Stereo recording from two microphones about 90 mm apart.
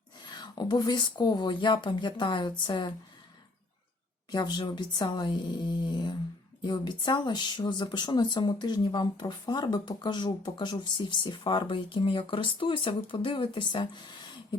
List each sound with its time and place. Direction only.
0.2 s speech: 55° left (ahead or behind)
4.3 s speech: 50° left (ahead or behind)